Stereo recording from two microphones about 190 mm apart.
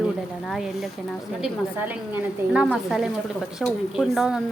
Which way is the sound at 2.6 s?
Centre (ahead or behind).